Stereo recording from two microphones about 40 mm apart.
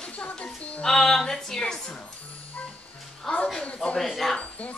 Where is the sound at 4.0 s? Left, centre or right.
Centre.